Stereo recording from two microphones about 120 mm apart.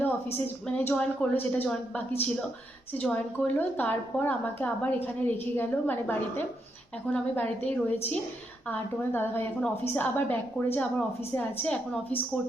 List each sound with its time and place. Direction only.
0.3 s a woman's voice: 15° left (ahead or behind)
3.0 s a woman's voice: 10° left (ahead or behind)